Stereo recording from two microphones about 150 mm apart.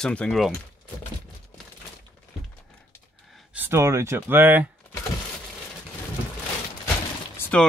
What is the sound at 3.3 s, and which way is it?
Speech, 10° right (ahead or behind).